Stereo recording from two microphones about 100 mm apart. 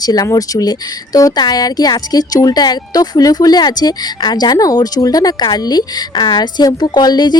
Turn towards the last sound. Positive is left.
turn(degrees=45)  # may be behind; listen again after turning